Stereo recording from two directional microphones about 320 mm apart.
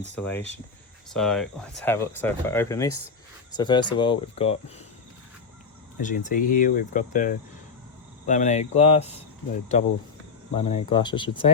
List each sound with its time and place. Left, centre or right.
0.2 s speech: centre
6.0 s speech: left
10.5 s speech: centre